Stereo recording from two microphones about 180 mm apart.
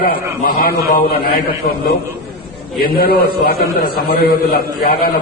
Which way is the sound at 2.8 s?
55° left (ahead or behind).